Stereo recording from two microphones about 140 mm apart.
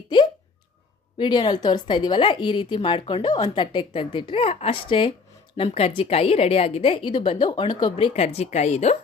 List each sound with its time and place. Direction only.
1.2 s a woman's voice: 35° left (ahead or behind); by 9.0 s 50° left (ahead or behind)